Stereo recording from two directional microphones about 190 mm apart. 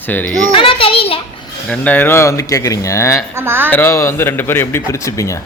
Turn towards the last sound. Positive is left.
turn(degrees=15)  # may be behind; listen again after turning